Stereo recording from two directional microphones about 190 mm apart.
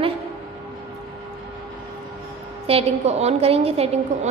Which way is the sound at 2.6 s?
30° right (ahead or behind).